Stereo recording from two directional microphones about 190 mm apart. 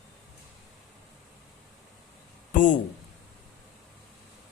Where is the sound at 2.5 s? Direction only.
40° left (ahead or behind).